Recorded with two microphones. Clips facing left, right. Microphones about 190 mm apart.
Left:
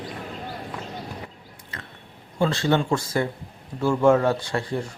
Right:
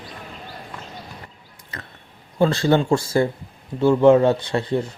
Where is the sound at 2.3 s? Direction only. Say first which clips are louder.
Right 4 dB; 35° right (ahead or behind).